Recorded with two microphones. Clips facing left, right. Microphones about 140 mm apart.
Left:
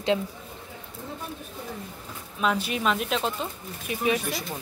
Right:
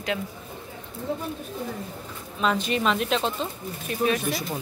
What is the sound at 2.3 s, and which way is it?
Speech, 5° left (ahead or behind).